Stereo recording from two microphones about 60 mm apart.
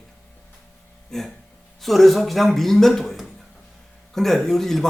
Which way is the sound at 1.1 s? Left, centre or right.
Centre.